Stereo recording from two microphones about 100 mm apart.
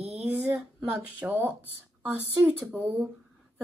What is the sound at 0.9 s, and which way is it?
Speech, 20° right (ahead or behind).